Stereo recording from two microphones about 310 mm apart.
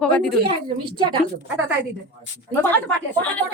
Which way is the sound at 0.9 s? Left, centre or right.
Centre.